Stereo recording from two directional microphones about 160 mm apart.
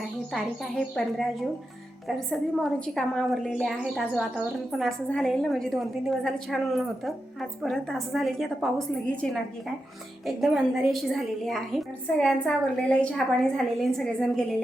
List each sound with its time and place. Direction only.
0.3 s a woman's voice: centre (ahead or behind)